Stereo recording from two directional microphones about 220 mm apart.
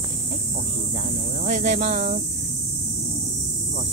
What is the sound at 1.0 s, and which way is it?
Cricket, 35° right (ahead or behind).